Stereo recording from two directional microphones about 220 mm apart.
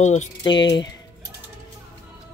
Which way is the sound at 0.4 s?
20° left (ahead or behind).